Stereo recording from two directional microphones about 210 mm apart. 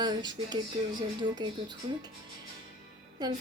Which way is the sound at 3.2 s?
20° right (ahead or behind).